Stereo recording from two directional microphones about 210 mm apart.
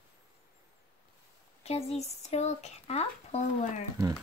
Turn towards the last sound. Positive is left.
turn(degrees=30)  # may be behind; listen again after turning